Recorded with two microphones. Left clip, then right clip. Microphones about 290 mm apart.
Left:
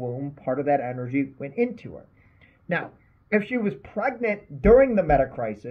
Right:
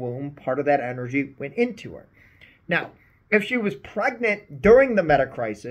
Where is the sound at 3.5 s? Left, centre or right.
Centre.